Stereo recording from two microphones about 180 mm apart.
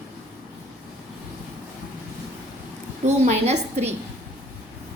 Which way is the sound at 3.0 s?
40° right (ahead or behind).